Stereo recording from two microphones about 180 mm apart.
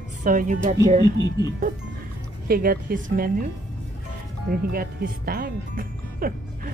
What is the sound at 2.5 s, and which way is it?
Speech, 55° right (ahead or behind).